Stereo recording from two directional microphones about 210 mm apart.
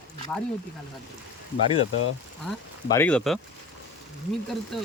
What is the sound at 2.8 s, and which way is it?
Speech, 10° left (ahead or behind).